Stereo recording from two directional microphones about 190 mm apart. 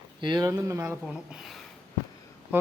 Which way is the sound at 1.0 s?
Centre (ahead or behind).